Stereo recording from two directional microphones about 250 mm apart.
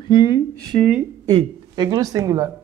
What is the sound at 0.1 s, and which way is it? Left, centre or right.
Speech, centre.